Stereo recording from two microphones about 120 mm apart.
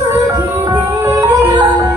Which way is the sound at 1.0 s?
25° right (ahead or behind).